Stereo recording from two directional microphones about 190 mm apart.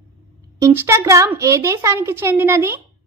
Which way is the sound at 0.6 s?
15° right (ahead or behind).